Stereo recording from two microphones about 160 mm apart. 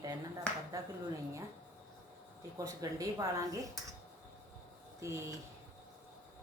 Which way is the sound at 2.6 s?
20° right (ahead or behind).